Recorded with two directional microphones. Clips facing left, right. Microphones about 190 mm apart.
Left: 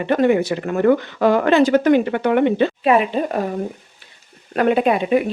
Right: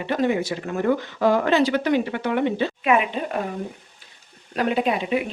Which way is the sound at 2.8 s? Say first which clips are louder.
Left 3 dB; 35° left (ahead or behind).